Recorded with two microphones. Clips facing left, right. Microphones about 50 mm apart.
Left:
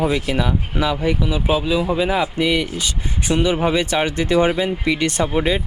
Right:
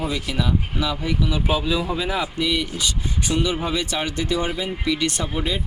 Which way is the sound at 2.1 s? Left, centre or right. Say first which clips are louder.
Left 5 dB; left.